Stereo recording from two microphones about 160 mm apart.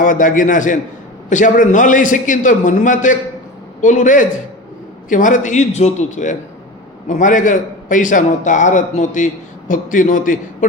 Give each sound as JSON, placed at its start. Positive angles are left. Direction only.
{"t": 0.0, "sound": "a man's voice", "side_deg": 55}